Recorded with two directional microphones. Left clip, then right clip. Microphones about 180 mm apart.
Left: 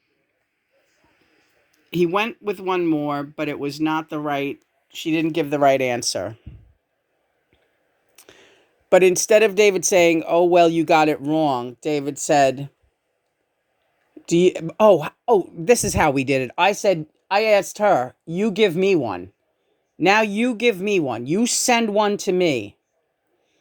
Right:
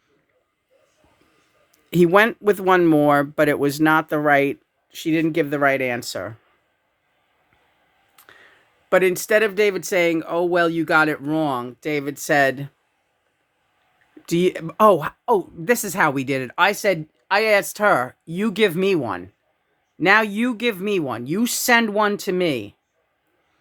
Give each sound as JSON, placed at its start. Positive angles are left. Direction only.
{"t": 1.7, "sound": "speech", "side_deg": -50}
{"t": 4.9, "sound": "speech", "side_deg": -20}
{"t": 5.6, "sound": "speech", "side_deg": 25}
{"t": 8.1, "sound": "a sound", "side_deg": 20}
{"t": 8.9, "sound": "a woman's voice", "side_deg": 20}
{"t": 14.3, "sound": "a woman's voice", "side_deg": 10}